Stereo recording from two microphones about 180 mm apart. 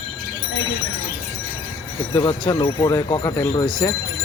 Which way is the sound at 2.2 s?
25° left (ahead or behind).